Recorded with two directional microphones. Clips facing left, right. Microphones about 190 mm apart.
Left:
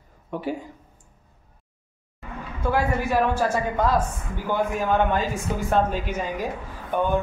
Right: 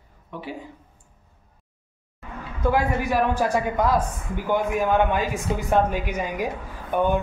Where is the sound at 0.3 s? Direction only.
45° left (ahead or behind).